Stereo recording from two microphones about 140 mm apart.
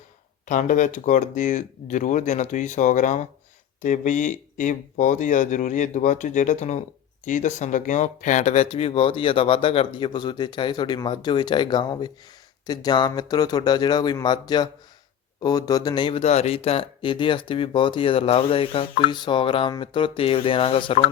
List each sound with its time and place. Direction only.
0.4 s speech: 65° left (ahead or behind); by 16.2 s 35° left (ahead or behind)
16.2 s speech: 50° left (ahead or behind)